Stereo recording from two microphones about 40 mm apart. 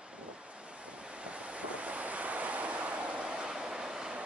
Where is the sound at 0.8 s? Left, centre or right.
Right.